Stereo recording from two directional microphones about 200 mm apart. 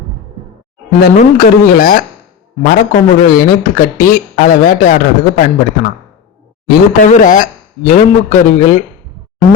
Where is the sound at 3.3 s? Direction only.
45° left (ahead or behind).